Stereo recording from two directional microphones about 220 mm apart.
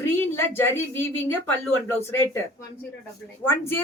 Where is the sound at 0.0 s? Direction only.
10° left (ahead or behind).